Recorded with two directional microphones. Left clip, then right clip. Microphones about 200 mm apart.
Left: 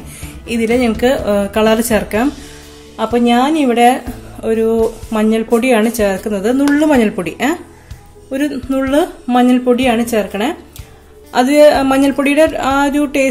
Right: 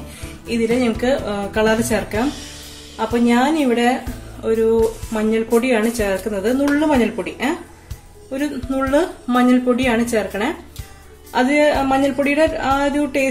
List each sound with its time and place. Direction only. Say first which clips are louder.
0.7 s speech: left 5 dB; 40° left (ahead or behind)